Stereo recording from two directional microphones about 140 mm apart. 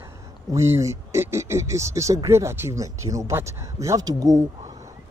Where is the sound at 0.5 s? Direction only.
20° right (ahead or behind).